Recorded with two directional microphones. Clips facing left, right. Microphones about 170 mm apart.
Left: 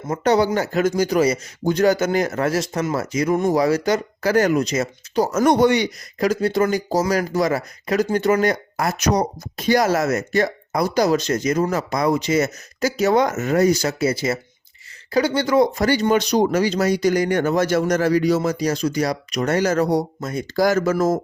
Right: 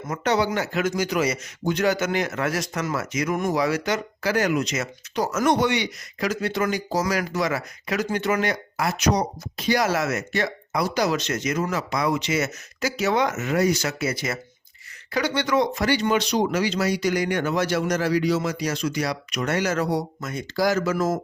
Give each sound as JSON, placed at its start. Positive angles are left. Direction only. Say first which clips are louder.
{"t": 0.1, "sound": "speech", "louder": "left 5 dB", "side_deg": 40}
{"t": 20.6, "sound": "speech", "louder": "left 4 dB", "side_deg": 50}